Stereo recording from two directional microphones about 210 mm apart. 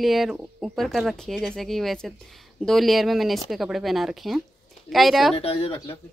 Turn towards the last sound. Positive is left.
turn(degrees=30)  # may be behind; listen again after turning